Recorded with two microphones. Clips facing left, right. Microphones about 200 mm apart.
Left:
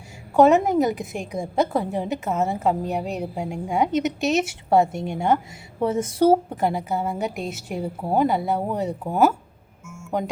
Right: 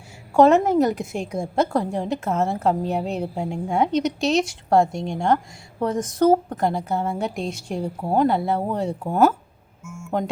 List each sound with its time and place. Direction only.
0.3 s a woman's voice: centre (ahead or behind)
9.8 s music: 30° right (ahead or behind)